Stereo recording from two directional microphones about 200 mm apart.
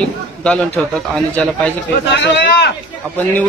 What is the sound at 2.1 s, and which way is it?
Speech, 60° left (ahead or behind).